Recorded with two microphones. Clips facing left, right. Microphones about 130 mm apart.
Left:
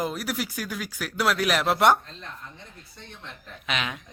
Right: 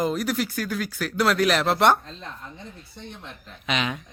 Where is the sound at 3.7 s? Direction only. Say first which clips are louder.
Right 4 dB; centre (ahead or behind).